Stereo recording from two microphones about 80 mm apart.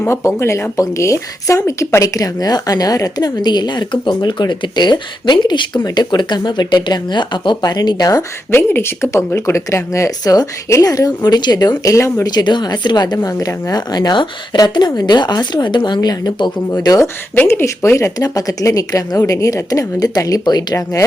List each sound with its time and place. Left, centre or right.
0.0 s speech: left
8.4 s speech: left
12.3 s speech: left
16.0 s speech: left
17.4 s speech: left